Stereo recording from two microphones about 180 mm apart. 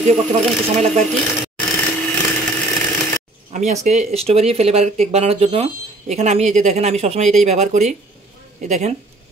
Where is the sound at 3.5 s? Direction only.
45° right (ahead or behind).